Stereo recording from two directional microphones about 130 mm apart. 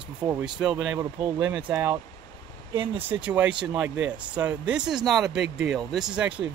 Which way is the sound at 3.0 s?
10° right (ahead or behind).